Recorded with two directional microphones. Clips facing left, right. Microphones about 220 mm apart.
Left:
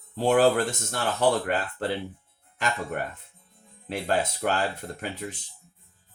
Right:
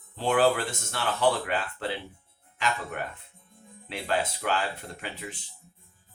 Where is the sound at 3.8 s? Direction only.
45° left (ahead or behind).